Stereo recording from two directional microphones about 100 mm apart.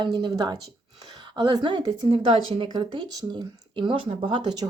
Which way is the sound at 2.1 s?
70° right (ahead or behind).